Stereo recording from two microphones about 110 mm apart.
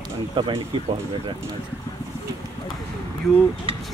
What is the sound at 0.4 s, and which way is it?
Speech, 55° right (ahead or behind).